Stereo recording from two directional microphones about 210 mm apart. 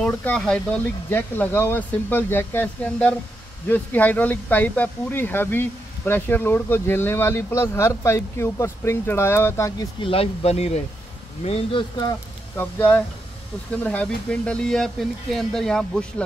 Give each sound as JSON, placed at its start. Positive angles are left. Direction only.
{"t": 0.0, "sound": "speech", "side_deg": 5}
{"t": 12.5, "sound": "speech", "side_deg": 10}